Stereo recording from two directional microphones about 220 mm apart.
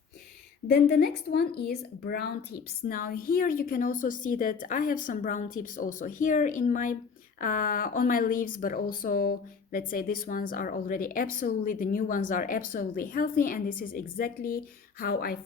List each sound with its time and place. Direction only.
0.7 s a woman's voice: 45° left (ahead or behind)